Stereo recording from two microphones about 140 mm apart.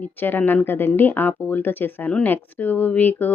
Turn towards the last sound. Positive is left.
turn(degrees=10)  # may be behind; listen again after turning